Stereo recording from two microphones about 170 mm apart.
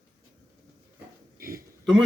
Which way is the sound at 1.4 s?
60° right (ahead or behind).